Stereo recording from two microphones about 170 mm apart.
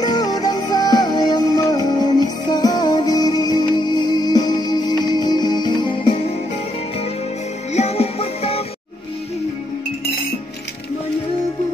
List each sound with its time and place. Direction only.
0.0 s music: 25° left (ahead or behind)
7.7 s music: 40° left (ahead or behind)